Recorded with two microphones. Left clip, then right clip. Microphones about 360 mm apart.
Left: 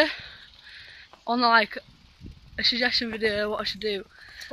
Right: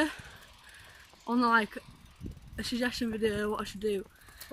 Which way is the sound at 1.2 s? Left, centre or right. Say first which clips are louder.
Left 6 dB; centre.